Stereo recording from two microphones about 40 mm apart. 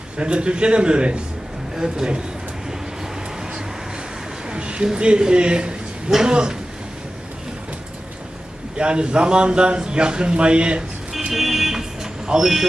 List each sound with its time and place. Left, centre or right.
0.2 s speech: right
4.4 s a sound: right
4.9 s speech: right
6.1 s speech: centre
6.3 s speech: right
8.8 s speech: right
11.3 s vehicle: centre
12.3 s speech: centre